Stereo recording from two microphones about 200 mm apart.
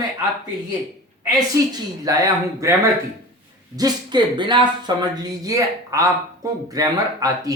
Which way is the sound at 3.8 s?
20° right (ahead or behind).